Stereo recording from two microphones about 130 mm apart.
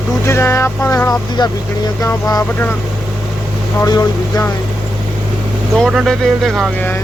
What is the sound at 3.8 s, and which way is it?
Speech, 25° left (ahead or behind).